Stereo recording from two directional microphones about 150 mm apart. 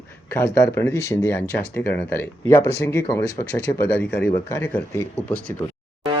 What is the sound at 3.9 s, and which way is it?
Speech, 10° left (ahead or behind).